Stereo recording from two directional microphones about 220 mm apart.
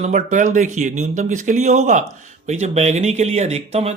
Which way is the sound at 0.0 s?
35° right (ahead or behind).